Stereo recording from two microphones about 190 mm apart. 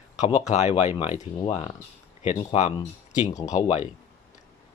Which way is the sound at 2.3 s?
30° left (ahead or behind).